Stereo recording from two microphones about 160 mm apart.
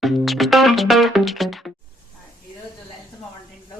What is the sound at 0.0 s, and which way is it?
Music, centre (ahead or behind).